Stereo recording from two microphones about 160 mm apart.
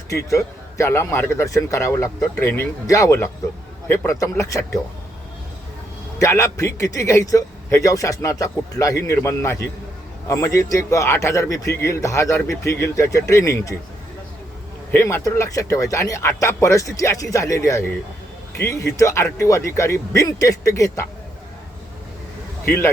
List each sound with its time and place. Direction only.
0.3 s a man's voice: 20° left (ahead or behind)
6.1 s a man's voice: 20° left (ahead or behind)
14.9 s a man's voice: 15° left (ahead or behind)
22.6 s speech: 15° left (ahead or behind)